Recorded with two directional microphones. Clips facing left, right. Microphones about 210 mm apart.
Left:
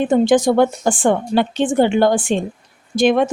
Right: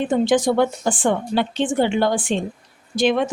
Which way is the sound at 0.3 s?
45° left (ahead or behind).